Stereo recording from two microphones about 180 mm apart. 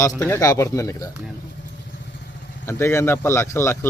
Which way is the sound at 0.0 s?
15° left (ahead or behind).